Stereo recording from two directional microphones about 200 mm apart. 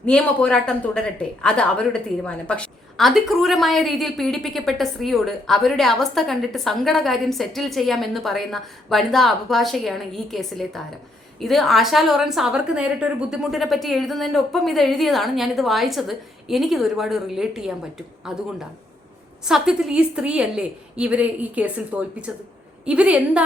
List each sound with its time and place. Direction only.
0.0 s a woman's voice: 5° left (ahead or behind)